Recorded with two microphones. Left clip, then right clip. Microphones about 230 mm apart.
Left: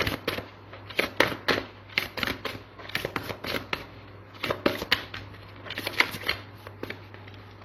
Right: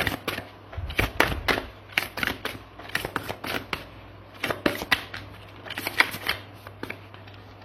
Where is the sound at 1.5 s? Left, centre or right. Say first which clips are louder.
Right 1 dB; centre.